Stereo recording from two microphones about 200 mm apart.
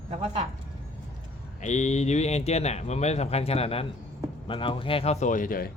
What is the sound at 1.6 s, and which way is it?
A man's voice, 35° left (ahead or behind).